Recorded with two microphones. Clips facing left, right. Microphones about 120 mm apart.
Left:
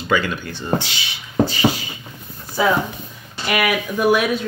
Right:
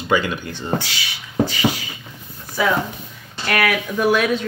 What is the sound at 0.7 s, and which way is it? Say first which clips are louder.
Speech: left 3 dB; 25° left (ahead or behind).